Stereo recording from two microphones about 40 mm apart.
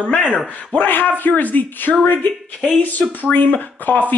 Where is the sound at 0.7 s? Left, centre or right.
Left.